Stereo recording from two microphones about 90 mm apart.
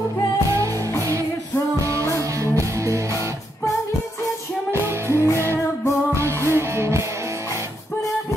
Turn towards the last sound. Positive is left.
turn(degrees=-30)  # may be behind; listen again after turning